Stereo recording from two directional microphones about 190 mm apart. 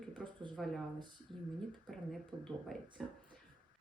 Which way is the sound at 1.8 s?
Centre (ahead or behind).